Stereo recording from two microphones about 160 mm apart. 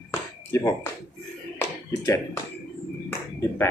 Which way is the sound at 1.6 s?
20° left (ahead or behind).